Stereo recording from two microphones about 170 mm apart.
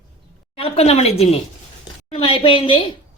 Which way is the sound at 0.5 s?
35° left (ahead or behind).